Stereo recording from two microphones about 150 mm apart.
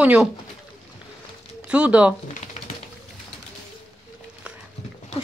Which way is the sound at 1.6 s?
10° right (ahead or behind).